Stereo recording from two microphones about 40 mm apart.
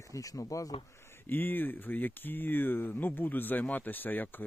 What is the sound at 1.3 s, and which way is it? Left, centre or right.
Speech, left.